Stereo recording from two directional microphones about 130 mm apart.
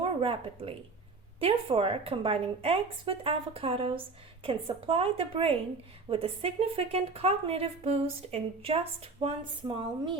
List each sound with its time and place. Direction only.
0.0 s a woman's voice: 45° right (ahead or behind)